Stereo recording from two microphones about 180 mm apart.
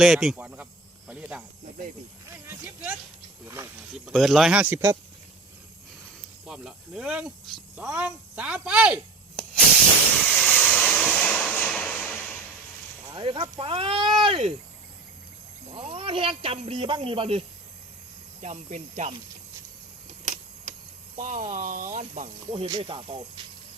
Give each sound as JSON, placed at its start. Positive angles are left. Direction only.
{"t": 0.0, "sound": "cricket", "side_deg": 0}
{"t": 2.5, "sound": "speech", "side_deg": -10}
{"t": 3.4, "sound": "snake", "side_deg": -15}
{"t": 3.9, "sound": "speech", "side_deg": 0}
{"t": 6.4, "sound": "speech", "side_deg": -5}
{"t": 10.2, "sound": "a sound", "side_deg": 5}
{"t": 13.1, "sound": "speech", "side_deg": -25}
{"t": 15.7, "sound": "speech", "side_deg": -30}
{"t": 18.4, "sound": "speech", "side_deg": -40}
{"t": 20.2, "sound": "a sound", "side_deg": -45}
{"t": 21.2, "sound": "speech", "side_deg": -45}